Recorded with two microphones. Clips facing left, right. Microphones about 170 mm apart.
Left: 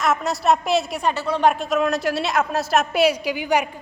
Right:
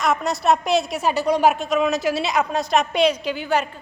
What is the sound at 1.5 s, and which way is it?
A woman's voice, centre (ahead or behind).